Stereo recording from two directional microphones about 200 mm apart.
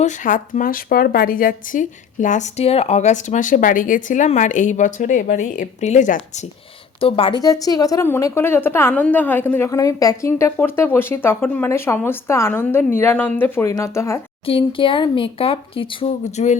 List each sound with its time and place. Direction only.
0.0 s a woman's voice: 40° left (ahead or behind); by 14.2 s 15° left (ahead or behind)
14.4 s speech: 25° left (ahead or behind)